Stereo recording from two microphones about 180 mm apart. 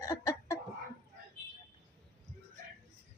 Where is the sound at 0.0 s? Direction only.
15° left (ahead or behind).